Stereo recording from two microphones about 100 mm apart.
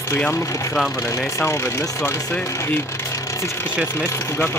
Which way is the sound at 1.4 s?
25° left (ahead or behind).